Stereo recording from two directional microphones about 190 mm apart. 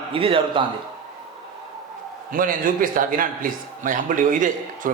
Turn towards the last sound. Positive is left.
turn(degrees=-45)  # may be behind; listen again after turning